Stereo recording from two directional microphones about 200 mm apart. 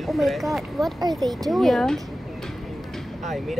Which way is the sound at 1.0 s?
20° right (ahead or behind).